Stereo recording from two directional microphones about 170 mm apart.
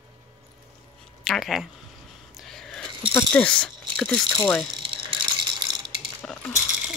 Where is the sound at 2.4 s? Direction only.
5° left (ahead or behind).